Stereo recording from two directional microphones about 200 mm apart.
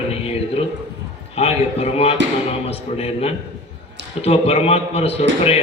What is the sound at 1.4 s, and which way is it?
A man's voice, 30° left (ahead or behind).